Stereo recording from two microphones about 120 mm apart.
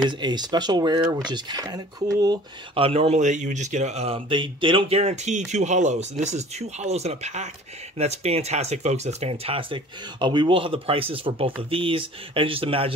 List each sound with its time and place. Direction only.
0.2 s speech: 35° right (ahead or behind)
2.7 s speech: 50° right (ahead or behind)
4.3 s speech: 45° right (ahead or behind)